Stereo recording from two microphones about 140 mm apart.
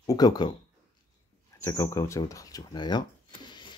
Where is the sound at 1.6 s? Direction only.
20° left (ahead or behind).